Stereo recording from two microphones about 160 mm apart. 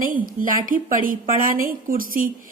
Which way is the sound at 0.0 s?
60° right (ahead or behind).